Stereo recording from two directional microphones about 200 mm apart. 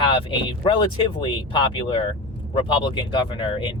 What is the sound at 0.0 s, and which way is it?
Speech, 25° left (ahead or behind).